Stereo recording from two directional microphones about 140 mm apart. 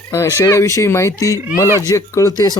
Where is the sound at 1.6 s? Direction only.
20° right (ahead or behind).